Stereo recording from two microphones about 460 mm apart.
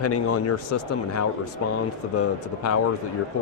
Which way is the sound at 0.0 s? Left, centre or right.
Left.